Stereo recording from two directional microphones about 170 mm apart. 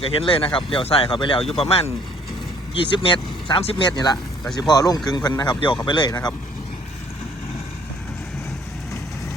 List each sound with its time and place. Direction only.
0.0 s a man's voice: 35° left (ahead or behind)